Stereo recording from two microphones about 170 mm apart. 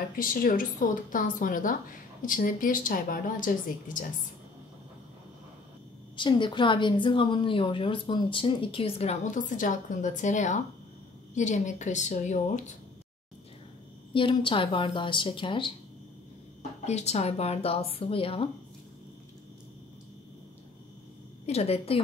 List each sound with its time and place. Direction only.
0.2 s a woman's voice: 55° left (ahead or behind)
6.1 s a woman's voice: 30° left (ahead or behind); by 12.7 s 45° left (ahead or behind)
14.1 s speech: 30° left (ahead or behind)
16.8 s a woman's voice: 40° left (ahead or behind)
21.5 s a woman's voice: 35° left (ahead or behind)